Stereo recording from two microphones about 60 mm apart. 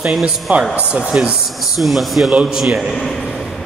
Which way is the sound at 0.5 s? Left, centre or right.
Right.